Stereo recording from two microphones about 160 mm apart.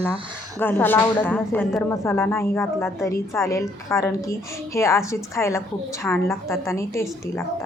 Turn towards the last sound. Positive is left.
turn(degrees=20)  # may be behind; listen again after turning